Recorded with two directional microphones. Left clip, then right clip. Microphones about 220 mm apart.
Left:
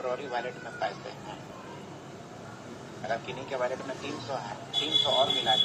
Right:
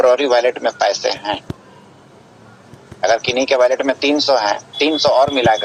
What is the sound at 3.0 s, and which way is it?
A man's voice, 50° right (ahead or behind).